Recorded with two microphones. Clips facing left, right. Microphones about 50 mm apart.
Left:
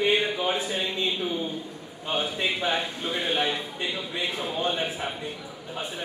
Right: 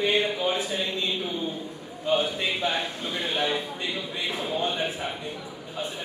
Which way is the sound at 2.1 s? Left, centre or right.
Left.